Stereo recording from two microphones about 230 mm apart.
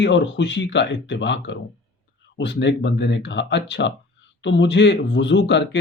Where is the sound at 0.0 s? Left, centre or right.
Left.